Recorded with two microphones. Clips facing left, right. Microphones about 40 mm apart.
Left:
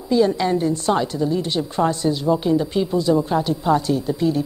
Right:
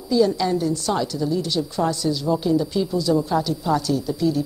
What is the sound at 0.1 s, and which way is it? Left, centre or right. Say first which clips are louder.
A woman's voice: left 1 dB; left.